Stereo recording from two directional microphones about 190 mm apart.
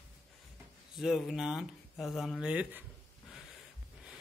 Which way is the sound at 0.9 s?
Centre (ahead or behind).